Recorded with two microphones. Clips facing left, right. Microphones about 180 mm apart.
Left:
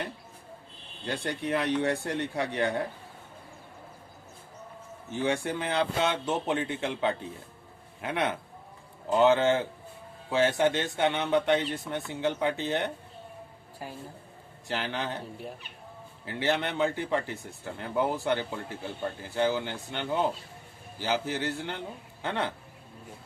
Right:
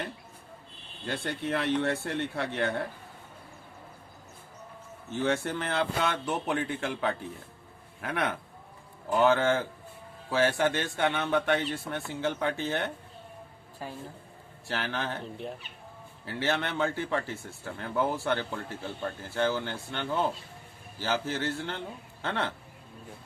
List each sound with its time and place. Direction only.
1.0 s a man's voice: 15° left (ahead or behind)
5.1 s a man's voice: 15° left (ahead or behind)
14.7 s a man's voice: 15° left (ahead or behind)
16.2 s a man's voice: 15° left (ahead or behind)